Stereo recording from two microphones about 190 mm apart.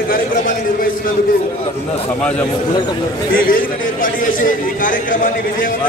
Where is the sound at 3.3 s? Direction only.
45° left (ahead or behind).